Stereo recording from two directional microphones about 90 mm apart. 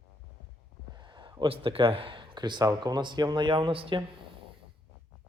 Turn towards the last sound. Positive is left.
turn(degrees=-80)